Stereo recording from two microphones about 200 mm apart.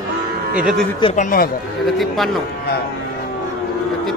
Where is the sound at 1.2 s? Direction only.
45° left (ahead or behind).